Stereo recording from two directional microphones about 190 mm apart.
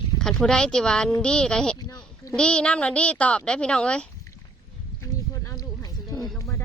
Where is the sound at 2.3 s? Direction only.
5° left (ahead or behind).